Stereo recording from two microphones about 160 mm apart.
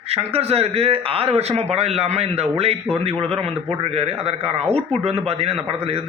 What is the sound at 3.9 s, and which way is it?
Speech, 40° right (ahead or behind).